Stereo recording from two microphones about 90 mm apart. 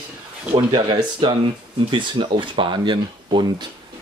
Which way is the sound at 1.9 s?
70° right (ahead or behind).